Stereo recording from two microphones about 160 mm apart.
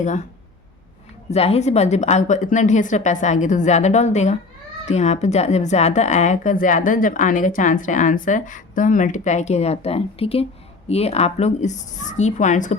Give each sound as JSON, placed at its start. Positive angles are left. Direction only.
{"t": 0.0, "sound": "speech", "side_deg": 45}
{"t": 1.3, "sound": "speech", "side_deg": 40}